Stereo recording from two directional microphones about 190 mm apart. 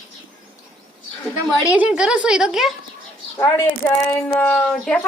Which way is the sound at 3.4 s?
15° left (ahead or behind).